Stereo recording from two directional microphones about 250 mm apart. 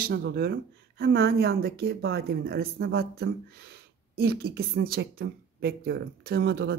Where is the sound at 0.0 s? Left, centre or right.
Right.